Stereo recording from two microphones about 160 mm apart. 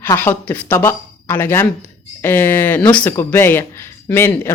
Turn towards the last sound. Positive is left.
turn(degrees=15)  # may be behind; listen again after turning